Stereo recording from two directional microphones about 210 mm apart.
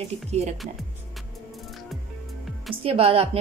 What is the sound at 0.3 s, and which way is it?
Speech, 30° right (ahead or behind).